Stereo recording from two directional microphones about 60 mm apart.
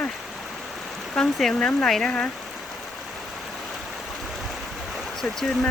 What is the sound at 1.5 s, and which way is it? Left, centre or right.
Speech, centre.